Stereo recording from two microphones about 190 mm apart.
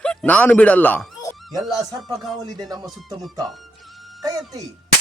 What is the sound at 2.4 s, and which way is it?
Speech, 20° right (ahead or behind).